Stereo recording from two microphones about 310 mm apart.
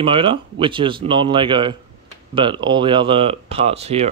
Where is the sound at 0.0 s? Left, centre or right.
Centre.